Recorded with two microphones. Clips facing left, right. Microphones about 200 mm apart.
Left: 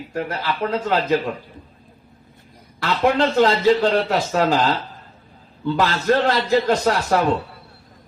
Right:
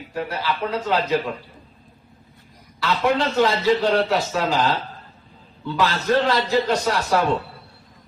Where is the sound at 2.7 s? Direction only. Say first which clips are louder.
Left 2 dB; 50° left (ahead or behind).